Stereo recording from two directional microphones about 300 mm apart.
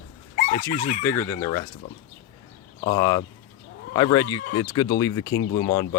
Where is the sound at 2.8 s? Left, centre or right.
Centre.